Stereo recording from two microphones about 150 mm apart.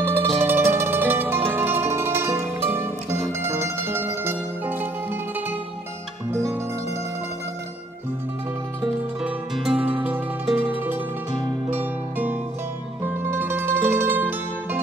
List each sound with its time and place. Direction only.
0.0 s music: 15° right (ahead or behind)
6.4 s music: 15° right (ahead or behind)
8.8 s music: 5° right (ahead or behind)